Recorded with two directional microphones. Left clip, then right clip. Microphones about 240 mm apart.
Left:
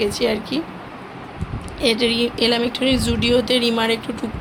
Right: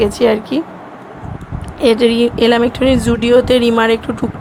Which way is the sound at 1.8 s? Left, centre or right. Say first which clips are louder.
Right 7 dB; right.